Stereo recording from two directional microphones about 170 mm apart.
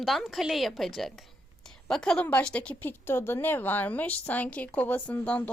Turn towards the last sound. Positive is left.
turn(degrees=10)  # may be behind; listen again after turning